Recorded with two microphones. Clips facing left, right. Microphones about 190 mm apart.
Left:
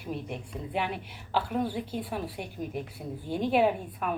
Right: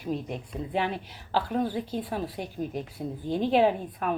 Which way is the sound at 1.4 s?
10° left (ahead or behind).